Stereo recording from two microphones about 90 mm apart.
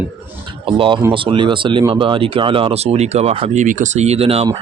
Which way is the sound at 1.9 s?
75° right (ahead or behind).